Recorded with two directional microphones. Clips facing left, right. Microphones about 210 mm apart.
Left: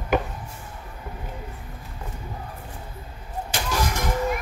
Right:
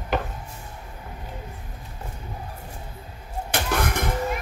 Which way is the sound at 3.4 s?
60° right (ahead or behind).